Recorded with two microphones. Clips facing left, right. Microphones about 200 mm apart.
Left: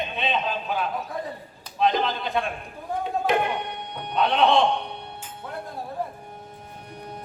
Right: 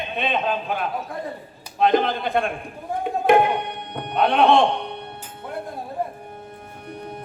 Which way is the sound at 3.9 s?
55° right (ahead or behind).